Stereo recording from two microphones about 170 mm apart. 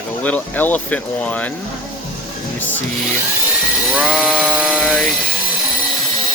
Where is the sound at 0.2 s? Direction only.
10° left (ahead or behind).